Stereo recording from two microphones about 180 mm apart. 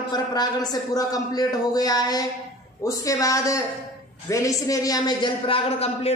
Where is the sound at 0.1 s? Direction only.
20° left (ahead or behind).